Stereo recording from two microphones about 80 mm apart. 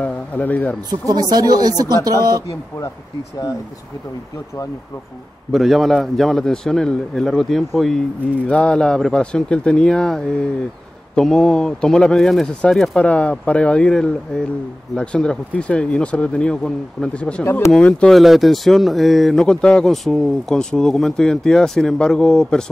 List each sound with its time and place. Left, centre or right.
0.0 s speech: left
0.8 s speech: right
5.5 s a man's voice: centre
8.5 s a man's voice: centre
19.4 s speech: centre